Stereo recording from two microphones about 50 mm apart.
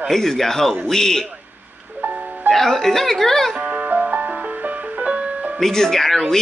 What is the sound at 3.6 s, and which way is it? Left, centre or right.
Music, right.